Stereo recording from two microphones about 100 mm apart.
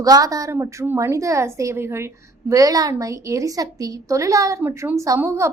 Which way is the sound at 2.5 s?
35° right (ahead or behind).